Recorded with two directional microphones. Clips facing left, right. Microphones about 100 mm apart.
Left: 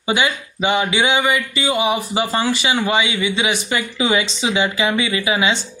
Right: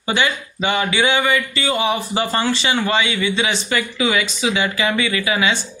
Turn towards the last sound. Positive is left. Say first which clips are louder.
# left 1 dB
turn(degrees=20)  # may be behind; listen again after turning